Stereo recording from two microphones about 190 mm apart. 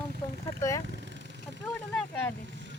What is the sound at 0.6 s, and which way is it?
Speech, 15° left (ahead or behind).